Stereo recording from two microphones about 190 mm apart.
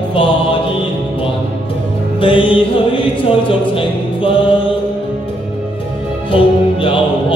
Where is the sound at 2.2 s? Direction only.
25° left (ahead or behind).